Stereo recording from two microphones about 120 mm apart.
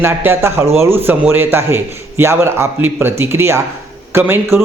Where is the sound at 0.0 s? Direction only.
20° right (ahead or behind).